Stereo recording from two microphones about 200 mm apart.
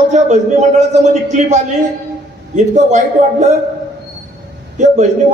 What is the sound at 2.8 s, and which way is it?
Speech, 35° right (ahead or behind).